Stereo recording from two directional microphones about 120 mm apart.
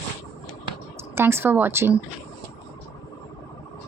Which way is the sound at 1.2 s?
20° right (ahead or behind).